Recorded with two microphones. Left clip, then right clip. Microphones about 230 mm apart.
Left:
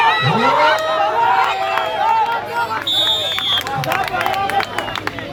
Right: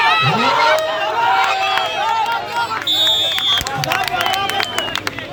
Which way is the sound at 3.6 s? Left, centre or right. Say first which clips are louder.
Even; right.